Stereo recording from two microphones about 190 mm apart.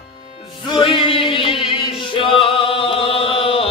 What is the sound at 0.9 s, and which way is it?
Music, 30° left (ahead or behind).